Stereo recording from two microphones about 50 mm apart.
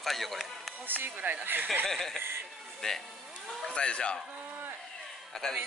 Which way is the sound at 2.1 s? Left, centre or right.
Right.